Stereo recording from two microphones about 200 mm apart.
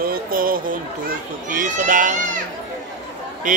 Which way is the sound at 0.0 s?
45° right (ahead or behind).